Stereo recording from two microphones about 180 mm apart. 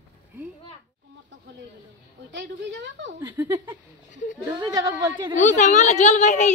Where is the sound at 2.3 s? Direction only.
80° right.